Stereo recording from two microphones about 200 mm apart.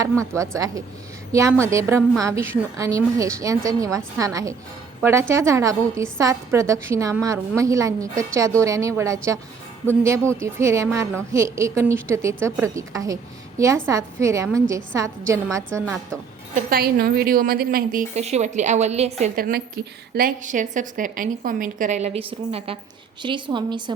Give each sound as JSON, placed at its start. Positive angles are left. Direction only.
{"t": 0.0, "sound": "a woman's voice", "side_deg": -15}
{"t": 10.4, "sound": "a woman's voice", "side_deg": -15}
{"t": 16.6, "sound": "a woman's voice", "side_deg": -45}
{"t": 19.4, "sound": "a woman's voice", "side_deg": -45}